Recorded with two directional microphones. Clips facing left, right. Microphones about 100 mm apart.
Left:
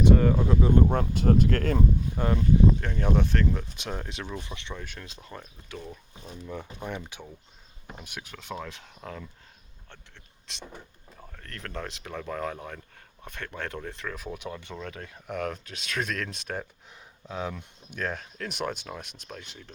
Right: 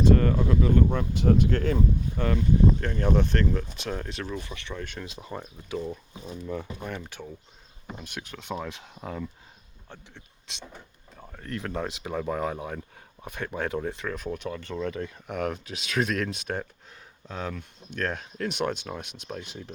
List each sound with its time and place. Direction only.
0.1 s a sound: 10° left (ahead or behind)
0.4 s speech: 25° left (ahead or behind)
0.9 s speech: 50° left (ahead or behind)
2.1 s speech: 20° left (ahead or behind)
2.8 s speech: 5° left (ahead or behind); by 4.7 s 20° left (ahead or behind)
4.7 s speech: 5° left (ahead or behind)
4.9 s speech: 5° right (ahead or behind)
7.1 s speech: 15° left (ahead or behind)
14.8 s speech: centre (ahead or behind)
17.2 s speech: 10° left (ahead or behind)